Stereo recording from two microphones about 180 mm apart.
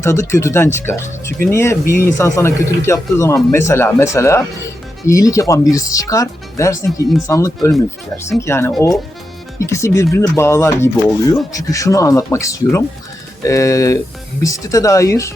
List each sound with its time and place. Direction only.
0.0 s speech: 15° left (ahead or behind)